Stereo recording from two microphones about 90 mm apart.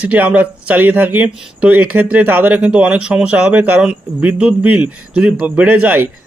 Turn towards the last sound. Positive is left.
turn(degrees=-20)  # may be behind; listen again after turning